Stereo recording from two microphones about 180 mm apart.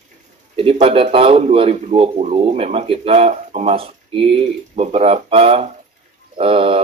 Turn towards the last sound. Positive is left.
turn(degrees=-30)  # may be behind; listen again after turning